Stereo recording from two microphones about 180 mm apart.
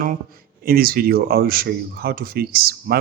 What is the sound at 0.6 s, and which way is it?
Speech, 55° right (ahead or behind).